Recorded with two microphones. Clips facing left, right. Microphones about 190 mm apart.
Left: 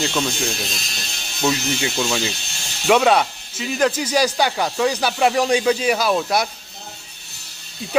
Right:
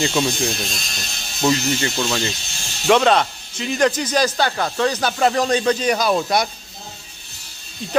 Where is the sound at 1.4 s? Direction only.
Centre (ahead or behind).